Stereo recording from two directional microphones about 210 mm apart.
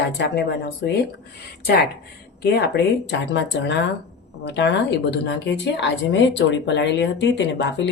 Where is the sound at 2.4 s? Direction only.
50° left (ahead or behind).